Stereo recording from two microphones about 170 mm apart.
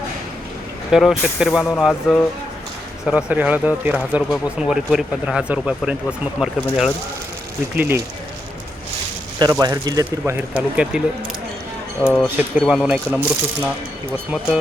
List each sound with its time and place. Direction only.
0.9 s speech: centre (ahead or behind)
3.1 s speech: 5° right (ahead or behind)
9.4 s speech: 25° right (ahead or behind)
12.1 s speech: centre (ahead or behind)